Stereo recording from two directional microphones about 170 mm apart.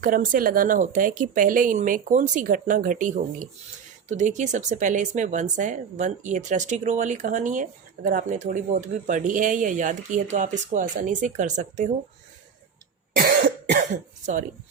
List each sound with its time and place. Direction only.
0.0 s speech: 50° right (ahead or behind)
13.1 s cough: 60° right (ahead or behind); by 14.4 s 45° right (ahead or behind)